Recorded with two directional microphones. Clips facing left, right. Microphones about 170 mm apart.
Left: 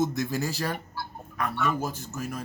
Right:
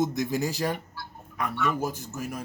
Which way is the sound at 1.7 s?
15° right (ahead or behind).